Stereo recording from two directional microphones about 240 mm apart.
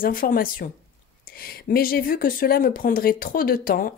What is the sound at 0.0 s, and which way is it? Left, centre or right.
A woman's voice, left.